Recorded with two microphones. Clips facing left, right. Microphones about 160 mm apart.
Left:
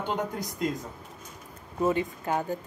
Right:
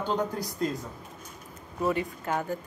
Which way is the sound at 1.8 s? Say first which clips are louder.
Left 2 dB; 20° left (ahead or behind).